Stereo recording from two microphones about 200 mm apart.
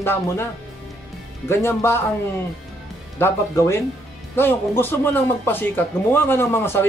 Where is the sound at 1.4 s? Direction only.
10° left (ahead or behind).